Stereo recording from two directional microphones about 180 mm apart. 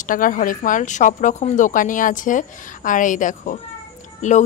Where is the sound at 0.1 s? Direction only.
50° left (ahead or behind).